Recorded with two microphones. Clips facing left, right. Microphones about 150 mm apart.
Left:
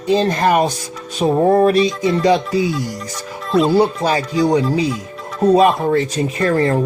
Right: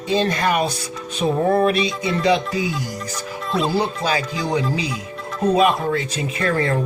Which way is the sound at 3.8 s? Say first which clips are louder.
Left 6 dB; 35° left (ahead or behind).